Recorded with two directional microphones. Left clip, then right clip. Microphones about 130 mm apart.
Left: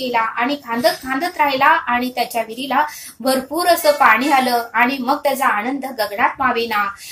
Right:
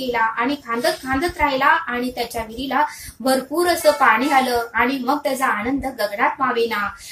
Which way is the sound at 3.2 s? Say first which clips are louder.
Left 1 dB; 40° left (ahead or behind).